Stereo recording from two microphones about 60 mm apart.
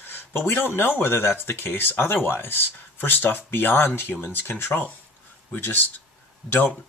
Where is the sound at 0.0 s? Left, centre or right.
Left.